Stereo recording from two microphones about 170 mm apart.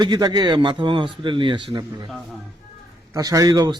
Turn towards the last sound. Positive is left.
turn(degrees=-20)  # may be behind; listen again after turning